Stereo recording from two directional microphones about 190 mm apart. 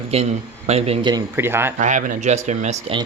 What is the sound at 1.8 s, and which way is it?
Speech, 40° right (ahead or behind).